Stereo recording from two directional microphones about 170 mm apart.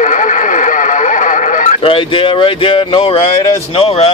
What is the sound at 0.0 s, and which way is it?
Radio, 50° left (ahead or behind).